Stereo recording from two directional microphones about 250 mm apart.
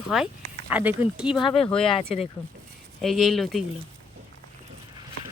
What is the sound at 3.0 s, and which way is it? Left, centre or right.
Speech, centre.